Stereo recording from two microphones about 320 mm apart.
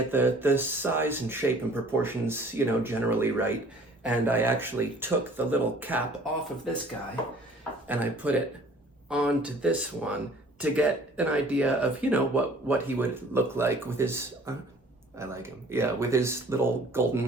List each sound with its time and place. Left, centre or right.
0.1 s speech: centre
7.9 s speech: centre